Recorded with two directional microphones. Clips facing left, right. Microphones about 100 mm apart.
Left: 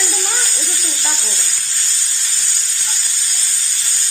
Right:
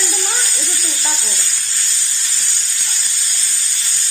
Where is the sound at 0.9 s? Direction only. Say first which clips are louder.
Even; 25° left (ahead or behind).